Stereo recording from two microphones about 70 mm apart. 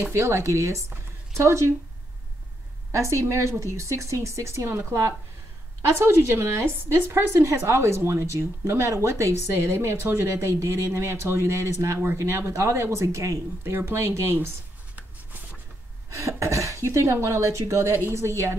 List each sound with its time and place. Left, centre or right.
0.0 s speech: right
2.9 s a woman's voice: right
16.1 s a woman's voice: right